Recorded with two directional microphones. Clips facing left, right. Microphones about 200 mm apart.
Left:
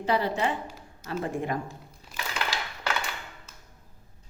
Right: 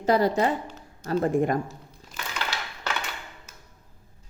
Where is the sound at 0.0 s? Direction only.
40° right (ahead or behind).